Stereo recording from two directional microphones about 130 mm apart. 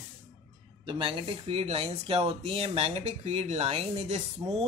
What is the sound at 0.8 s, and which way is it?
Speech, 40° right (ahead or behind).